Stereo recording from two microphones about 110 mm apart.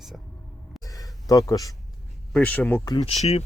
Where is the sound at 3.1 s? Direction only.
70° left (ahead or behind).